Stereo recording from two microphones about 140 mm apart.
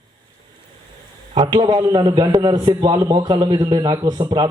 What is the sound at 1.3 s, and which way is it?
A man's voice, 35° right (ahead or behind).